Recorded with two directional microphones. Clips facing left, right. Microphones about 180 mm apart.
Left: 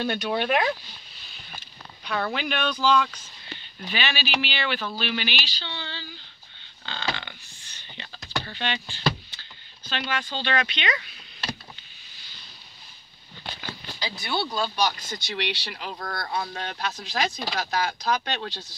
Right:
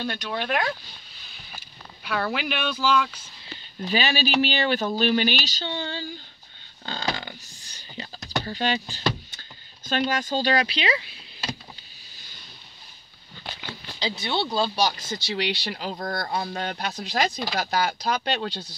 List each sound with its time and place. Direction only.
0.0 s speech: 5° left (ahead or behind)
2.0 s speech: 5° right (ahead or behind)
3.8 s speech: 40° right (ahead or behind)
14.2 s speech: 25° right (ahead or behind)